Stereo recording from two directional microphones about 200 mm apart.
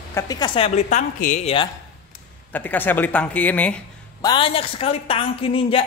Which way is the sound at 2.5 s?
10° left (ahead or behind).